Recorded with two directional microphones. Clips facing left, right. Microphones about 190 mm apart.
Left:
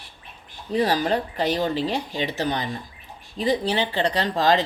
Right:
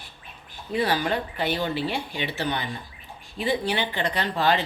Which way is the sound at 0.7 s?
35° left (ahead or behind).